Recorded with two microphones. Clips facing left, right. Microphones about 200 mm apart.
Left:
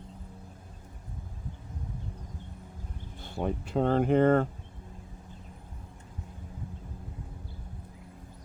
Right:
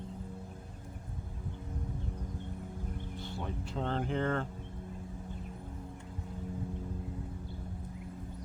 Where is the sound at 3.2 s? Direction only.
55° left (ahead or behind).